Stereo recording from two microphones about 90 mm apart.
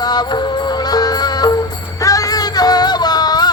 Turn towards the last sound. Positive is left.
turn(degrees=50)  # may be behind; listen again after turning